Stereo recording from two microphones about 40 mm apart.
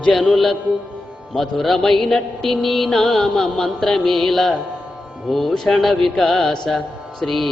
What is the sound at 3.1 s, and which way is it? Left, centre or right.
Speech, centre.